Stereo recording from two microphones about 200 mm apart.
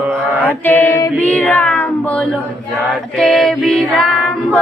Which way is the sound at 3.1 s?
Centre (ahead or behind).